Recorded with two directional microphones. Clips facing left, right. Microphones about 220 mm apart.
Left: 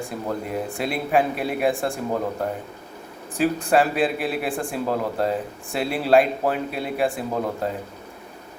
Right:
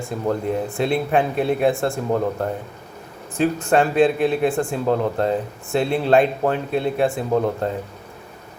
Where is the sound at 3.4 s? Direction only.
Centre (ahead or behind).